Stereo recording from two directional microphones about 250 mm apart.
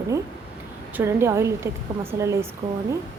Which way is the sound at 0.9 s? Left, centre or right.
Centre.